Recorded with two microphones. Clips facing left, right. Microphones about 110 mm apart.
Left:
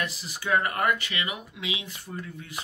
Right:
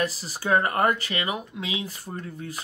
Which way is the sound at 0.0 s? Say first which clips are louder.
Right 5 dB; 35° right (ahead or behind).